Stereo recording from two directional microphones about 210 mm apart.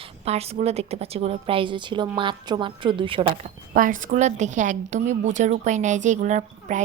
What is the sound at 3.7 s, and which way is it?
A woman's voice, 40° right (ahead or behind).